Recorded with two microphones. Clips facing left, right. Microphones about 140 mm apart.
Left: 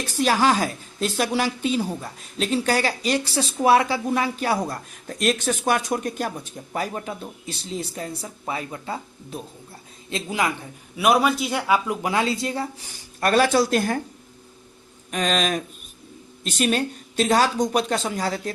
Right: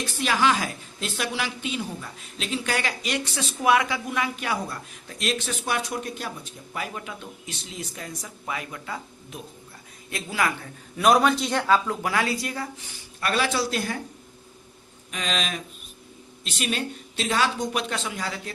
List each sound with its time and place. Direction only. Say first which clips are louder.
0.1 s a woman's voice: left 4 dB; 40° left (ahead or behind); by 10.7 s 20° left (ahead or behind)
10.9 s speech: even; 5° left (ahead or behind); by 12.9 s 25° left (ahead or behind)
12.9 s speech: left 8 dB; 45° left (ahead or behind)
15.1 s a woman's voice: left 7 dB; 45° left (ahead or behind)